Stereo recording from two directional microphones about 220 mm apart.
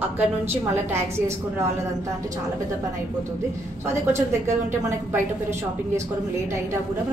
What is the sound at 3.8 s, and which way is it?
A woman's voice, 10° right (ahead or behind).